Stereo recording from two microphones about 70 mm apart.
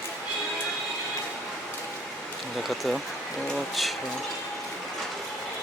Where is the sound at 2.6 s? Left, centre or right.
Centre.